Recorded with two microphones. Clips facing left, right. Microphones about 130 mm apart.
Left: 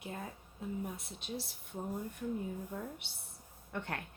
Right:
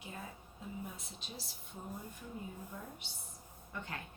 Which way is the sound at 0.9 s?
60° left (ahead or behind).